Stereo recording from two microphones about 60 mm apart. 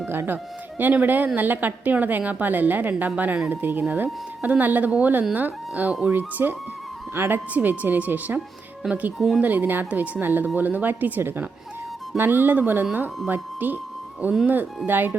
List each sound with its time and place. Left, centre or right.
0.1 s speech: right
9.1 s speech: centre
9.4 s speech: right